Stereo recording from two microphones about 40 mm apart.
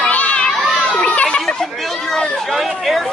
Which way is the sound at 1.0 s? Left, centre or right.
Left.